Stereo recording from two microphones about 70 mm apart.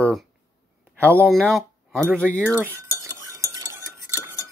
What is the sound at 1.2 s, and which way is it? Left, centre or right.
Speech, centre.